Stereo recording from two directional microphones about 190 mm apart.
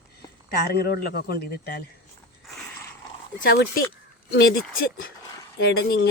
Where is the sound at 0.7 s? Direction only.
55° left (ahead or behind).